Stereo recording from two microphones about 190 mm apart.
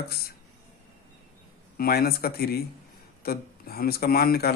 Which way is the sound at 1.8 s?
55° left (ahead or behind).